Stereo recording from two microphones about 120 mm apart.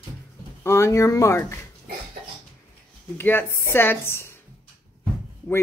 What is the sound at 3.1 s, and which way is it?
Speech, 15° left (ahead or behind).